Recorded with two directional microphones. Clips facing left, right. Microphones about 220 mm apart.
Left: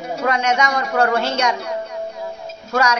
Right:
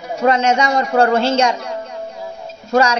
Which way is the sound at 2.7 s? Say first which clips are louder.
Right 5 dB; 25° right (ahead or behind).